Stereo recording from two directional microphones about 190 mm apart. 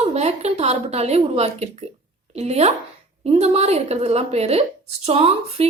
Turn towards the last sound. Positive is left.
turn(degrees=-30)  # may be behind; listen again after turning